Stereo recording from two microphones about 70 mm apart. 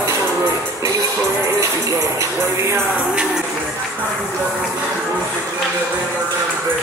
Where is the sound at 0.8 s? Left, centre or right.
Right.